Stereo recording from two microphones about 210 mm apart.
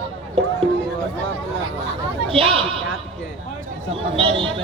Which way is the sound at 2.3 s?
25° right (ahead or behind).